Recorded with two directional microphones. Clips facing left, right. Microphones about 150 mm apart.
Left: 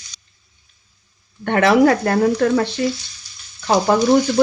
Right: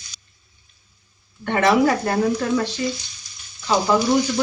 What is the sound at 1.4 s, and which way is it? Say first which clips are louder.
Speech: left 4 dB; 55° left (ahead or behind).